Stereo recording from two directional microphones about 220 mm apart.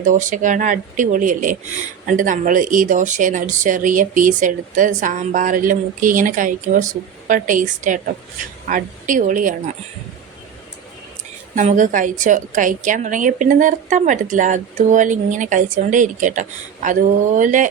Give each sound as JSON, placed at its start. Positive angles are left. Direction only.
{"t": 0.0, "sound": "a woman's voice", "side_deg": -35}
{"t": 11.5, "sound": "a woman's voice", "side_deg": -35}